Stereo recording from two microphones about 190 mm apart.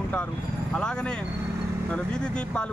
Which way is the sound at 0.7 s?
5° left (ahead or behind).